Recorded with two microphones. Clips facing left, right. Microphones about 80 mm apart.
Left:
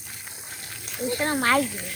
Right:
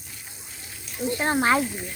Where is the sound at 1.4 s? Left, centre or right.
Centre.